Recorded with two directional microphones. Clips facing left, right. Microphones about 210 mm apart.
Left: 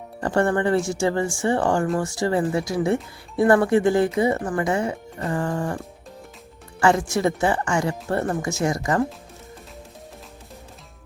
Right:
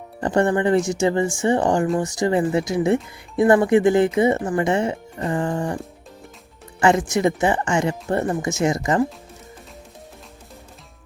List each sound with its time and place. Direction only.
0.2 s speech: 20° right (ahead or behind)